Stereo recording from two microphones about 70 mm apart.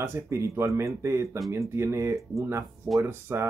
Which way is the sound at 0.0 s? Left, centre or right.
Right.